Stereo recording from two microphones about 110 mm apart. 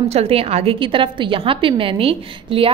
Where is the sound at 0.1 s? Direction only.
65° right (ahead or behind).